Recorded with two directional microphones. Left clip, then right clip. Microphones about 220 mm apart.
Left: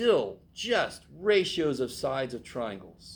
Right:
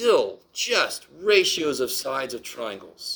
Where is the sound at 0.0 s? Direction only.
40° right (ahead or behind).